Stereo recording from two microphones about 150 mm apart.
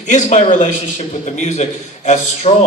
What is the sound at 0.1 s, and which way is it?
A man's voice, 50° left (ahead or behind).